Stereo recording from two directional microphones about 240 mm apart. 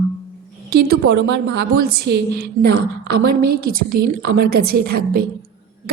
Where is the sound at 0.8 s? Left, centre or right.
Right.